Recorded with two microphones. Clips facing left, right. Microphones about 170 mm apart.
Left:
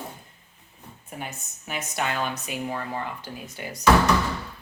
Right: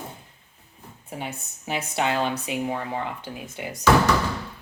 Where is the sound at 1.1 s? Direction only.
25° right (ahead or behind).